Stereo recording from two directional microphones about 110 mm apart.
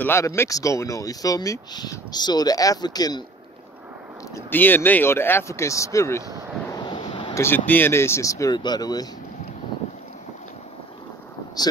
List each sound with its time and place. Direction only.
0.0 s speech: 25° left (ahead or behind)
4.5 s speech: 20° left (ahead or behind)
6.7 s a sound: 40° left (ahead or behind)
7.3 s speech: 20° left (ahead or behind); by 9.1 s 35° left (ahead or behind)